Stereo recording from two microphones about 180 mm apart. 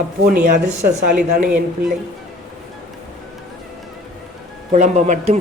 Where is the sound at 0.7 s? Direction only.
45° right (ahead or behind).